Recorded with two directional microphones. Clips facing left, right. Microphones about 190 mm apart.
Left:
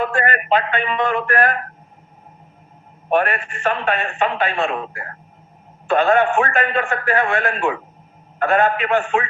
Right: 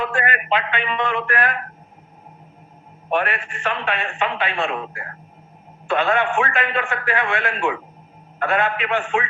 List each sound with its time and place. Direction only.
0.0 s a man's voice: 45° left (ahead or behind)
3.1 s a man's voice: 45° left (ahead or behind)